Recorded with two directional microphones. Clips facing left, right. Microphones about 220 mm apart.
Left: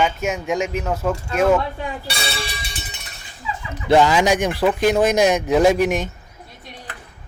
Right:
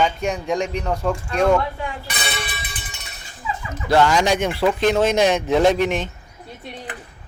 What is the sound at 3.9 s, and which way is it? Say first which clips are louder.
Speech: left 2 dB; 10° left (ahead or behind).